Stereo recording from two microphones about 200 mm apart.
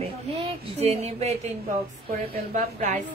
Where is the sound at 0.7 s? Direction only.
30° right (ahead or behind).